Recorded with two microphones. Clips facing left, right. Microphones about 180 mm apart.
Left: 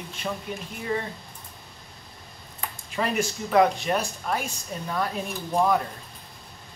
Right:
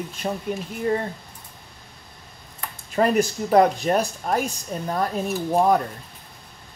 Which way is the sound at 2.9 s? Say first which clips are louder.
Right 7 dB; 40° right (ahead or behind).